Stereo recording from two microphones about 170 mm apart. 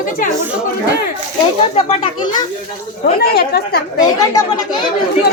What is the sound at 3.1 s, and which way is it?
Speech, 70° left (ahead or behind).